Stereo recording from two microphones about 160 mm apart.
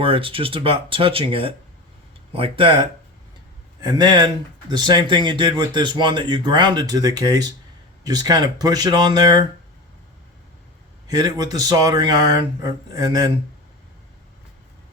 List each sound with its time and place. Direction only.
0.0 s speech: 35° right (ahead or behind)
11.1 s speech: 25° right (ahead or behind)